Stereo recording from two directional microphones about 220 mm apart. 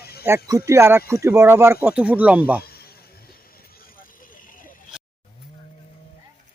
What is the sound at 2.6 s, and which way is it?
Vehicle, 45° left (ahead or behind).